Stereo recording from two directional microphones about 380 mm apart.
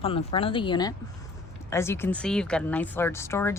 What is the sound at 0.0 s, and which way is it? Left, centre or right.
Speech, centre.